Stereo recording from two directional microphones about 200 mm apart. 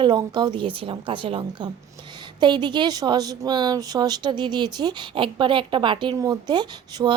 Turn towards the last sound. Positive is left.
turn(degrees=-20)  # may be behind; listen again after turning